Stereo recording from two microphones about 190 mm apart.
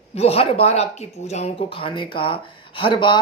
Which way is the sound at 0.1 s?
30° left (ahead or behind).